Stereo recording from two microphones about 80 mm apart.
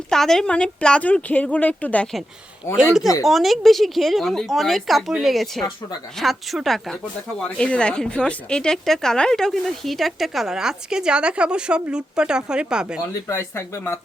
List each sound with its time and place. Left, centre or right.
0.1 s speech: centre
2.6 s speech: left
3.2 s speech: centre
13.2 s speech: left